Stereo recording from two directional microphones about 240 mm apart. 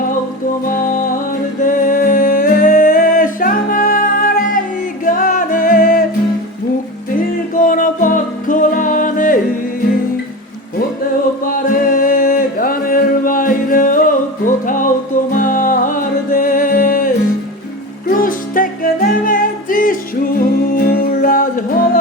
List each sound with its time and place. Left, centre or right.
0.6 s music: left
7.5 s music: left
11.4 s music: left
18.1 s music: left